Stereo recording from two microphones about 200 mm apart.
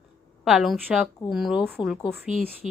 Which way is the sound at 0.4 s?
Centre (ahead or behind).